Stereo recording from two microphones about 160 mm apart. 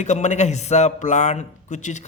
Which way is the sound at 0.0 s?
50° left (ahead or behind).